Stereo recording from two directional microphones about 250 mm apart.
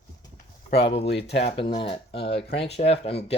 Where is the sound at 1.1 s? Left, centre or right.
Left.